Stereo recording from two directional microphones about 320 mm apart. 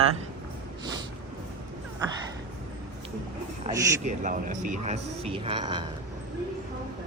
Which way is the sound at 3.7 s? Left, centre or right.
Right.